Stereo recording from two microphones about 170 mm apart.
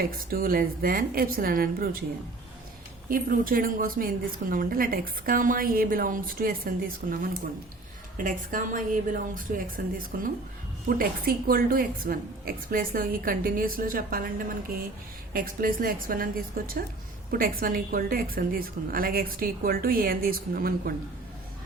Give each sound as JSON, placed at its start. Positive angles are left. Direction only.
{"t": 0.0, "sound": "a woman's voice", "side_deg": -60}
{"t": 3.1, "sound": "a woman's voice", "side_deg": -55}
{"t": 8.2, "sound": "a woman's voice", "side_deg": -50}
{"t": 15.3, "sound": "a woman's voice", "side_deg": -55}